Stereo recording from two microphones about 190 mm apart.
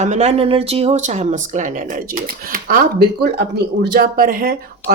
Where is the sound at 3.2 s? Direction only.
60° right (ahead or behind).